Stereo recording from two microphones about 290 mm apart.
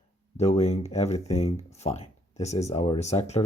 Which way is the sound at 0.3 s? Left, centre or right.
Left.